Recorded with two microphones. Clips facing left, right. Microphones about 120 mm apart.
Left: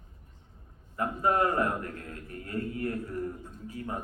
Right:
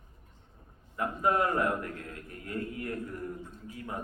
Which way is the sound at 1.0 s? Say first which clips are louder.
Left 1 dB; 40° left (ahead or behind).